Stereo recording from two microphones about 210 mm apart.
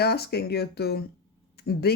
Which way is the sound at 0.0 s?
50° left (ahead or behind).